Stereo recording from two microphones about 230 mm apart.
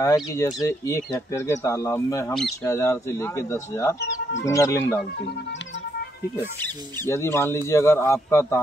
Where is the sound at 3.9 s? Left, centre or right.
Left.